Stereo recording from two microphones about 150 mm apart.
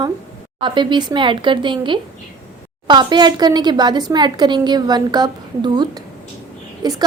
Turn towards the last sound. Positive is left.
turn(degrees=-25)  # may be behind; listen again after turning